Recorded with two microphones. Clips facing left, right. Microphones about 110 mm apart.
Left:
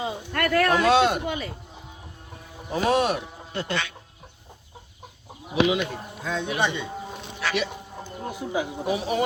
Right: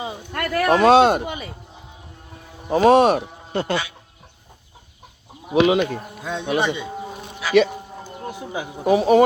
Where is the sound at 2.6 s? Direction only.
45° right (ahead or behind).